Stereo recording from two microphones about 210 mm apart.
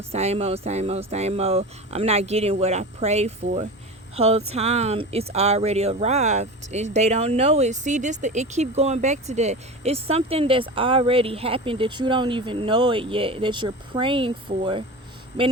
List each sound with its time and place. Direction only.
0.1 s speech: 30° right (ahead or behind)